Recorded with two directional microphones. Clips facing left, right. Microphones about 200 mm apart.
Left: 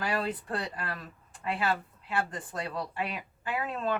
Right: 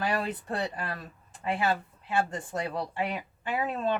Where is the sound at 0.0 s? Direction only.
25° right (ahead or behind).